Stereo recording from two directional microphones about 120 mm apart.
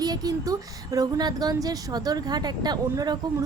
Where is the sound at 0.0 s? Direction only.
30° right (ahead or behind).